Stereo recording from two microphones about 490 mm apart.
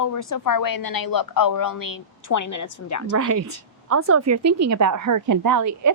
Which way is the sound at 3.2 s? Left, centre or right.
Right.